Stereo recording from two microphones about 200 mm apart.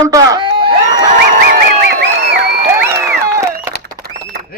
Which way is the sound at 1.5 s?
55° right (ahead or behind).